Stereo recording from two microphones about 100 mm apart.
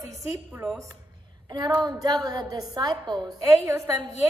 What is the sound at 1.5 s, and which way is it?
A woman's voice, 45° right (ahead or behind).